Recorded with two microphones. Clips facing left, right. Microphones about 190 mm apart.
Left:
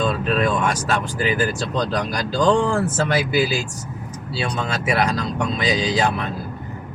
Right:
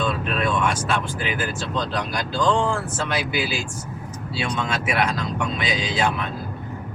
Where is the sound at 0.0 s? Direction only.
40° left (ahead or behind).